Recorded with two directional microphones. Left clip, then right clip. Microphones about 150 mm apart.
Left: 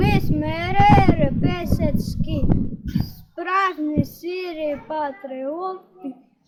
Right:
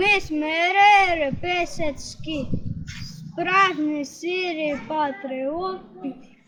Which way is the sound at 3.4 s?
10° right (ahead or behind).